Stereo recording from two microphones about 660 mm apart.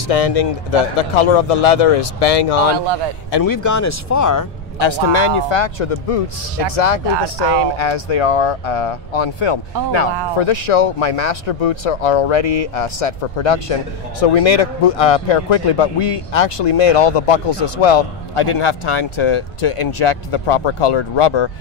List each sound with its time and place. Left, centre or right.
0.1 s speech: left
3.3 s speech: left
4.7 s speech: left
7.7 s speech: left